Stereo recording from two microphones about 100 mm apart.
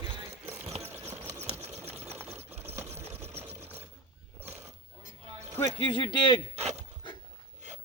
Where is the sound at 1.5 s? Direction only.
90° right.